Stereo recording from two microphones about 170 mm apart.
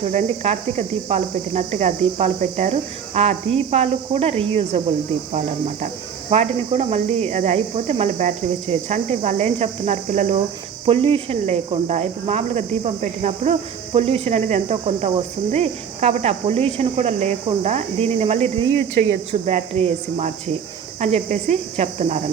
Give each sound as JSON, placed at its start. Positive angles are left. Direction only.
{"t": 0.0, "sound": "speech", "side_deg": -45}